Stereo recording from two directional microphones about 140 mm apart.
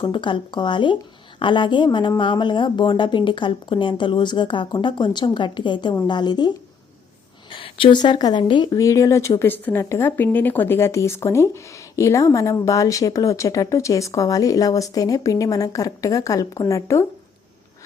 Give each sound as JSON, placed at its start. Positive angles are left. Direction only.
{"t": 0.0, "sound": "a woman's voice", "side_deg": 35}
{"t": 7.5, "sound": "a woman's voice", "side_deg": 35}